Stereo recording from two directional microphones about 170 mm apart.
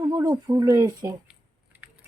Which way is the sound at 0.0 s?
25° right (ahead or behind).